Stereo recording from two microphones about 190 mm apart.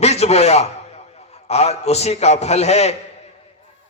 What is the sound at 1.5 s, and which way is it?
A man's voice, 35° left (ahead or behind).